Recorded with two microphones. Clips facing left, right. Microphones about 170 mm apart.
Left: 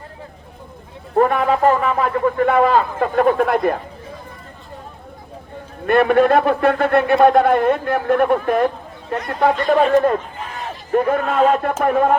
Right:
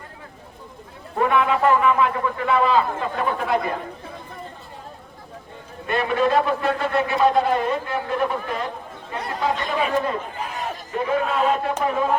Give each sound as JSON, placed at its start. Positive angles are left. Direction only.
{"t": 1.1, "sound": "a man's voice", "side_deg": 45}
{"t": 5.8, "sound": "a man's voice", "side_deg": 55}